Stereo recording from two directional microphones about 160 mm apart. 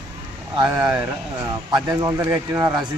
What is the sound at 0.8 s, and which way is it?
Speech, 20° right (ahead or behind).